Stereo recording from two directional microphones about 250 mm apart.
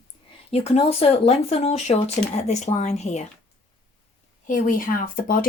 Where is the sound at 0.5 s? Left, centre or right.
Left.